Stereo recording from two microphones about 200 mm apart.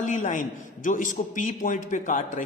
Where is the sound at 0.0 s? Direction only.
40° left (ahead or behind).